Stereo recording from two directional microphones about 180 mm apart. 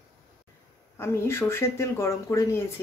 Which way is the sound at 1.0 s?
15° left (ahead or behind).